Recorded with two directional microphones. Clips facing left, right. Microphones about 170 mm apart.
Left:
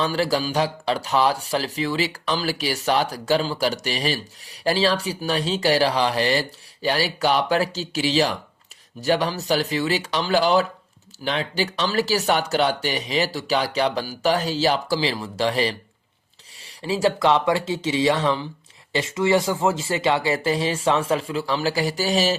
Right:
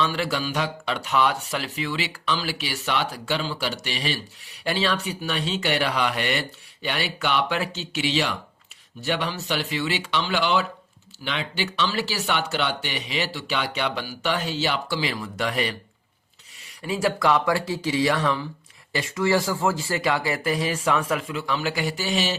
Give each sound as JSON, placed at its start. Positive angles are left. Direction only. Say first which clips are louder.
{"t": 0.0, "sound": "speech", "louder": "left 3 dB", "side_deg": 40}